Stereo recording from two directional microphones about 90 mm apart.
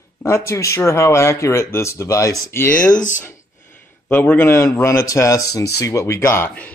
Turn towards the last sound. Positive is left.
turn(degrees=30)  # may be behind; listen again after turning